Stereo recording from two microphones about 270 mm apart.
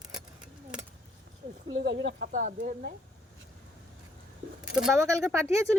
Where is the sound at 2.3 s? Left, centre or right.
Right.